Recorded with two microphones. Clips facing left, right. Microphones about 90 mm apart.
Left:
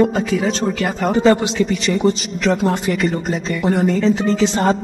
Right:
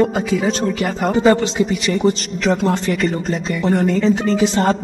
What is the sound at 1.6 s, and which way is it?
A man's voice, 5° right (ahead or behind).